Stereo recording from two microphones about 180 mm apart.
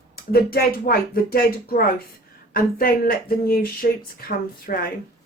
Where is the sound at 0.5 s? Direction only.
55° left (ahead or behind).